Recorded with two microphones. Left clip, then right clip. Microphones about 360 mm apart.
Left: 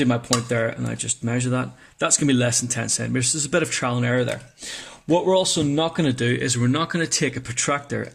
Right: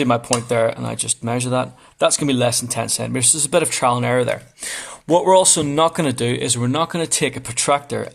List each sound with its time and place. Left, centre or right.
0.5 s speech: centre
5.0 s speech: right
5.3 s speech: centre